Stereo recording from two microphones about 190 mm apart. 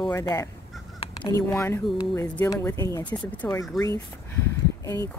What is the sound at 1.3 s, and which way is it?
Speech, 15° left (ahead or behind).